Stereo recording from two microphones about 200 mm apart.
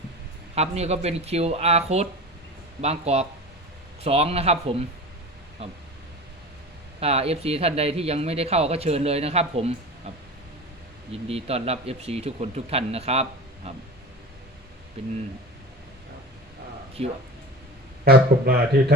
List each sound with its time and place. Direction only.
0.5 s speech: 30° right (ahead or behind)
7.0 s speech: 30° right (ahead or behind)
11.1 s speech: 30° right (ahead or behind)
15.0 s speech: 30° right (ahead or behind)
17.0 s speech: 35° right (ahead or behind)
18.0 s speech: 50° right (ahead or behind)